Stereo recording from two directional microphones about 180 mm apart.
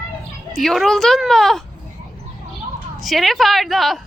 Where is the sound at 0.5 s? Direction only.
Centre (ahead or behind).